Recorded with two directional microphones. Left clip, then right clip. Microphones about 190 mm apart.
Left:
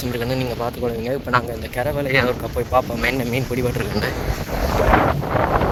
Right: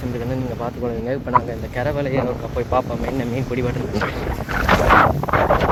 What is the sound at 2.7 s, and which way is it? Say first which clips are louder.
Speech: left 3 dB; 40° left (ahead or behind).